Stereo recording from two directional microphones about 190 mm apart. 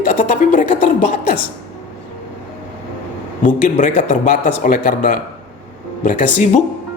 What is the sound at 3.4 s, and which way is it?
A man's voice, 40° left (ahead or behind).